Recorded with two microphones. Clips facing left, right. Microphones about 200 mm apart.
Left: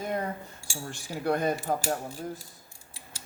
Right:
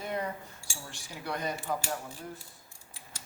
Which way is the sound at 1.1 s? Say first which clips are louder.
Left 8 dB; 50° left (ahead or behind).